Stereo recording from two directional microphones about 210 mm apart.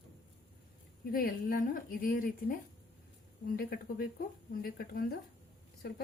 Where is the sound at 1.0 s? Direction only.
45° left (ahead or behind).